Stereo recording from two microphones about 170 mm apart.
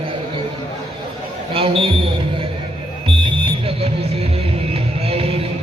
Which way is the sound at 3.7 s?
35° right (ahead or behind).